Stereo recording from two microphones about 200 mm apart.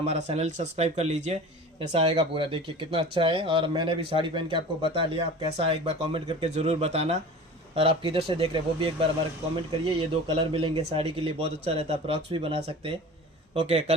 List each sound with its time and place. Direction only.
0.0 s speech: 30° right (ahead or behind)